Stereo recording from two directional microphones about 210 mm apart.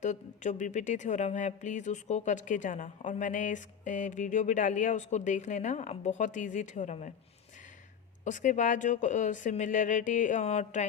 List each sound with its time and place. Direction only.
0.0 s speech: 35° left (ahead or behind)
8.2 s speech: 35° left (ahead or behind)